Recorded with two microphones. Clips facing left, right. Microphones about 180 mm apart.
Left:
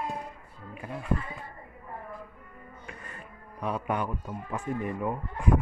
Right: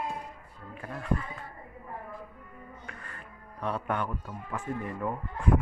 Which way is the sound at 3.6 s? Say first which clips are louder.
Left 1 dB; 10° left (ahead or behind).